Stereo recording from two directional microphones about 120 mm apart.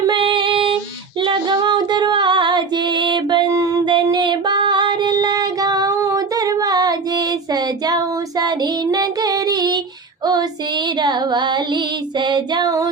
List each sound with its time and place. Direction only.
0.0 s female singing: 40° right (ahead or behind)
3.8 s music: 40° right (ahead or behind)
11.0 s music: 40° right (ahead or behind)